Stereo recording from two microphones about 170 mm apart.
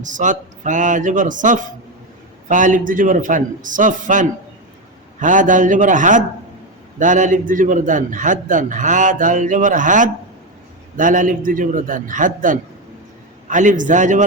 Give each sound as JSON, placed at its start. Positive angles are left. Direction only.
{"t": 0.0, "sound": "a man's voice", "side_deg": -50}